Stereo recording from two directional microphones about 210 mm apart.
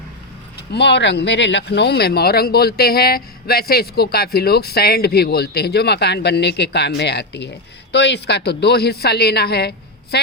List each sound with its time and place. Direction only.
0.7 s speech: 55° left (ahead or behind)